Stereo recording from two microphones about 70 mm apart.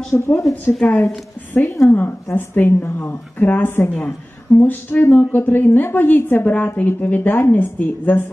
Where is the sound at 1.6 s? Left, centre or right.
Left.